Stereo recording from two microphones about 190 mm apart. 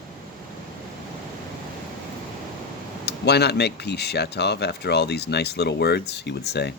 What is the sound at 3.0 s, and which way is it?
Speech, 60° left (ahead or behind).